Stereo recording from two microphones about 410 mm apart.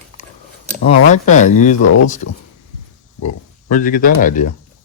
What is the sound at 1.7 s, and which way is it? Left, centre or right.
Speech, left.